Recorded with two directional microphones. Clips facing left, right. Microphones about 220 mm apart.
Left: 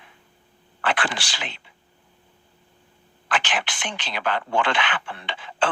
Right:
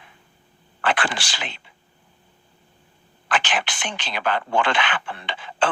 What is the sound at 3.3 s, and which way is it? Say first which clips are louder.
Speech: right 2 dB; 45° right (ahead or behind).